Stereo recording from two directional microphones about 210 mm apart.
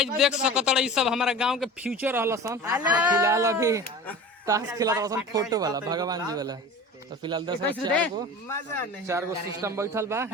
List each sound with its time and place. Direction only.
0.0 s speech: 5° right (ahead or behind); by 7.6 s 20° right (ahead or behind)
7.9 s speech: 5° left (ahead or behind)
9.0 s speech: 15° right (ahead or behind)